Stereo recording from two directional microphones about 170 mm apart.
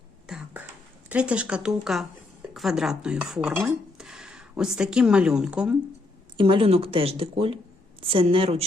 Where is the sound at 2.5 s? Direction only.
Centre (ahead or behind).